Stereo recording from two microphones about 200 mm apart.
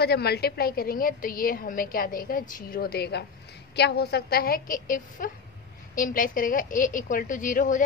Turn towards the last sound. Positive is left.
turn(degrees=40)  # may be behind; listen again after turning